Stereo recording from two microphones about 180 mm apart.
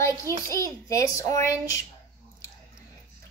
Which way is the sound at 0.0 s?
15° left (ahead or behind).